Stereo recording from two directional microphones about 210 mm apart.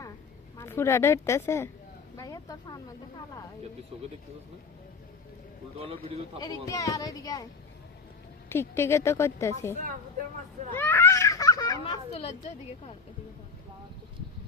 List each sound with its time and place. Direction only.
0.5 s a woman's voice: 10° left (ahead or behind)
5.7 s a man's voice: 25° right (ahead or behind)
6.4 s a woman's voice: 15° left (ahead or behind)
8.4 s a woman's voice: 10° left (ahead or behind)
10.8 s a child's voice: 10° left (ahead or behind)
12.1 s a woman's voice: 30° left (ahead or behind)